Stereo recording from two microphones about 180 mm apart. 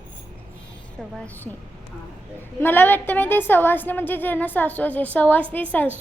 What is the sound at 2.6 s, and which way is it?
A woman's voice, 10° left (ahead or behind).